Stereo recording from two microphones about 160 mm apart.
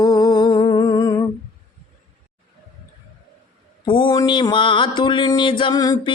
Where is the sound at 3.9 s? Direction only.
30° left (ahead or behind).